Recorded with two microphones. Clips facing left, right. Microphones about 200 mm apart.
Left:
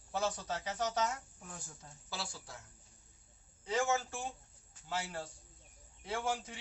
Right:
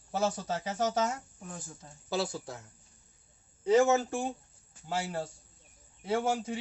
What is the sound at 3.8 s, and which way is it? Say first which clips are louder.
Speech: right 8 dB; 55° right (ahead or behind).